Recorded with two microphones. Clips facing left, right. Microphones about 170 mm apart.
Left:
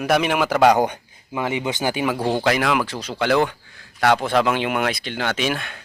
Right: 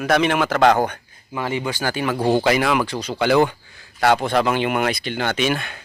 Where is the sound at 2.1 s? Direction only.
Centre (ahead or behind).